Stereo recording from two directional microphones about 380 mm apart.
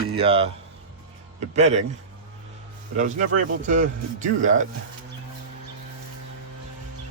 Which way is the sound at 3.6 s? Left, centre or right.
Centre.